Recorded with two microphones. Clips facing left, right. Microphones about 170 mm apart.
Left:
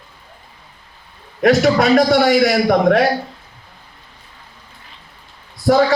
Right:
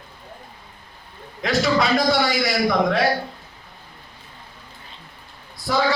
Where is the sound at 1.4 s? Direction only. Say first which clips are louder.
Left 7 dB; 60° left (ahead or behind).